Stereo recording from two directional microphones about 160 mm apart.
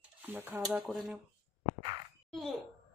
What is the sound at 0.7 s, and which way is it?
Speech, centre (ahead or behind).